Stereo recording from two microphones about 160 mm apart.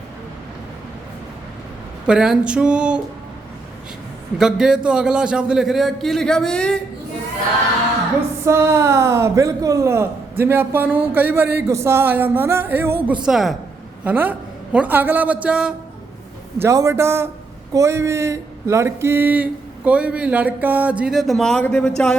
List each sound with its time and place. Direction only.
2.0 s a man's voice: 5° right (ahead or behind)
4.4 s a man's voice: 5° right (ahead or behind)
8.4 s a man's voice: 15° right (ahead or behind)
13.2 s a man's voice: centre (ahead or behind)
16.6 s a man's voice: 20° right (ahead or behind); by 22.1 s 5° left (ahead or behind)